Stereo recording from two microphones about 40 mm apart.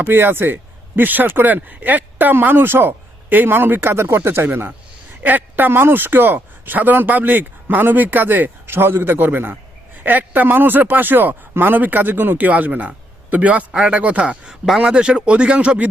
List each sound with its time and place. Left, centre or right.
0.1 s speech: right
4.4 s speech: right
5.2 s speech: right
10.0 s speech: right
12.5 s a man's voice: right